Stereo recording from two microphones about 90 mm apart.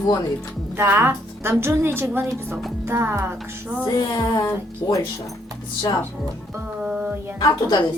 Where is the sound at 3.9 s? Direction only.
45° left (ahead or behind).